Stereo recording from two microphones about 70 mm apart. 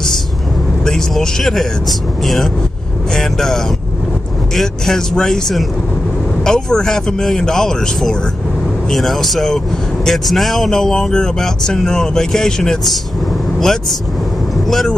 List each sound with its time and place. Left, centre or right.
0.8 s speech: centre